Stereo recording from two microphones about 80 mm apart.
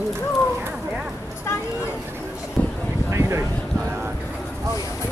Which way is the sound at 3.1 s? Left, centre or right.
Right.